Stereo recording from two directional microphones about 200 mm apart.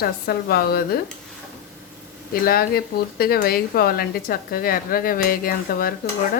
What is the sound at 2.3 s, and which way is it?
Speech, 50° left (ahead or behind).